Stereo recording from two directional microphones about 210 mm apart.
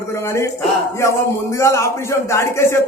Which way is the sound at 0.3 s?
15° left (ahead or behind).